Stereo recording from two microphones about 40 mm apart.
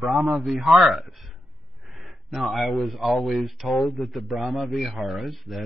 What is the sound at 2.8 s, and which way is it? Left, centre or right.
Speech, centre.